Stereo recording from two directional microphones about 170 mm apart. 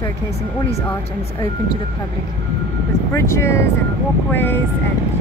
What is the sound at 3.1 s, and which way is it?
Speech, 15° left (ahead or behind).